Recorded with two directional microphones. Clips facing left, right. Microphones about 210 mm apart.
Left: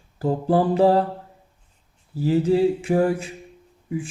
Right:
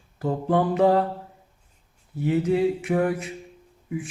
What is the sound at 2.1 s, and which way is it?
Speech, 30° left (ahead or behind).